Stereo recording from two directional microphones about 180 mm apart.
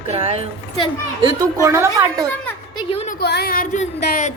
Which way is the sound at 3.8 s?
40° left (ahead or behind).